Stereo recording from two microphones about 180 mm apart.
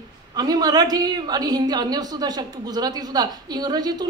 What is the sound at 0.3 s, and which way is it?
A woman's voice, 20° right (ahead or behind).